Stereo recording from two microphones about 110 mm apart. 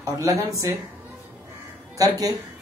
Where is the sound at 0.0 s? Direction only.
30° right (ahead or behind).